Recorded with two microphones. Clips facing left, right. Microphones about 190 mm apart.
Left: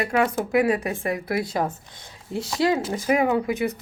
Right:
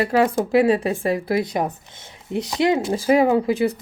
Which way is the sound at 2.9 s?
30° right (ahead or behind).